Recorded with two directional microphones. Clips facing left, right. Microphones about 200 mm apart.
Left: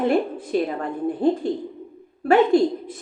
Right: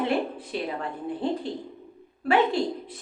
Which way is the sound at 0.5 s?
45° left (ahead or behind).